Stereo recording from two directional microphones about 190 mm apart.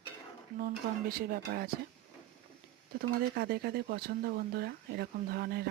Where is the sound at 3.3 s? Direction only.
55° right (ahead or behind).